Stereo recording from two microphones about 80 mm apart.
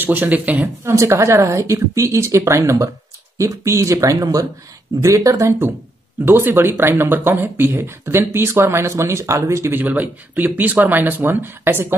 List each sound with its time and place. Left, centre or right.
0.0 s speech: right
0.8 s speech: right
9.7 s speech: right